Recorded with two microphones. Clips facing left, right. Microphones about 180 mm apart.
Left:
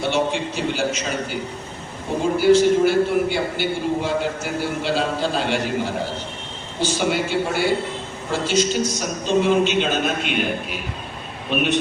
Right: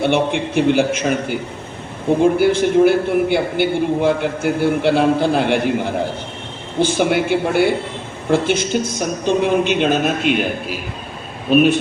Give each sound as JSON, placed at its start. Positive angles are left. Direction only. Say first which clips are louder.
{"t": 0.0, "sound": "a man's voice", "louder": "right 4 dB", "side_deg": -60}
{"t": 11.4, "sound": "speech", "louder": "right 10 dB", "side_deg": -40}